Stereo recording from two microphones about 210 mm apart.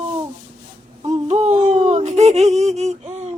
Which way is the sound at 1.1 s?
35° right (ahead or behind).